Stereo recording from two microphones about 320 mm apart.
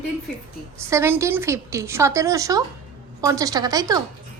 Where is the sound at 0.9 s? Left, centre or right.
Centre.